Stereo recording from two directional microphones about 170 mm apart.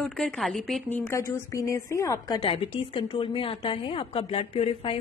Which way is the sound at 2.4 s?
30° left (ahead or behind).